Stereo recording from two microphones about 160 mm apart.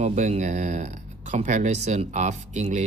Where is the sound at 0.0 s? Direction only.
45° right (ahead or behind).